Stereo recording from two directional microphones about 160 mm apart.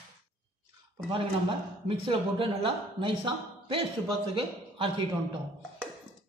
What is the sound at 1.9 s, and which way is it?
A man's voice, 35° right (ahead or behind).